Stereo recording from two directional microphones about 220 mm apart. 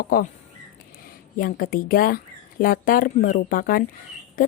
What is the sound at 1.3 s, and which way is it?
A woman's voice, 40° left (ahead or behind).